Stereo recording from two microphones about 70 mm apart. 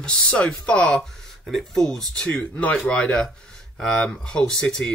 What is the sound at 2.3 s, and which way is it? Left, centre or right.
Speech, centre.